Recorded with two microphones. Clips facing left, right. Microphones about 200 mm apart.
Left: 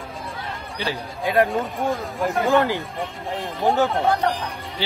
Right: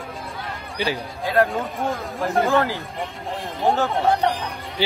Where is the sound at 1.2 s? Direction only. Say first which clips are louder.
Left 1 dB; 15° left (ahead or behind).